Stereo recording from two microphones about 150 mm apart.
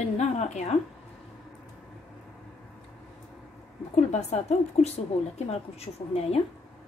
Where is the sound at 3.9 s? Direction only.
50° left (ahead or behind).